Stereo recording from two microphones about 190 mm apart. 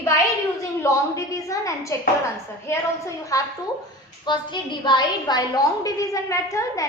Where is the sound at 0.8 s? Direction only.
15° left (ahead or behind).